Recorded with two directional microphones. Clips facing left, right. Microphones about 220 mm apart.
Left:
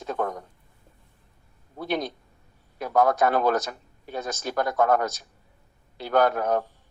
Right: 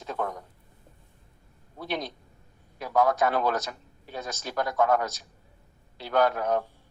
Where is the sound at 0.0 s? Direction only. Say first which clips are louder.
Left 4 dB; 45° left (ahead or behind).